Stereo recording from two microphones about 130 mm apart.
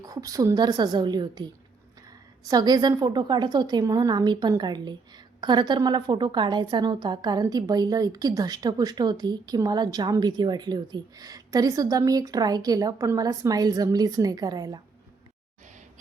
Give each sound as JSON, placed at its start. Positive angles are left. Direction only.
{"t": 0.0, "sound": "a woman's voice", "side_deg": -30}